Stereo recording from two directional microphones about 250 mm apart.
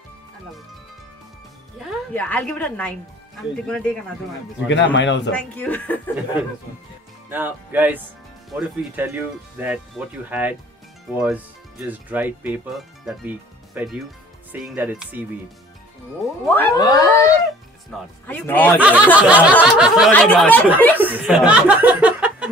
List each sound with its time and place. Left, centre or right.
1.8 s speech: centre
4.6 s speech: left
5.3 s speech: centre
7.2 s speech: centre
16.4 s speech: centre
18.8 s speech: centre
21.0 s speech: centre
21.5 s chuckle: centre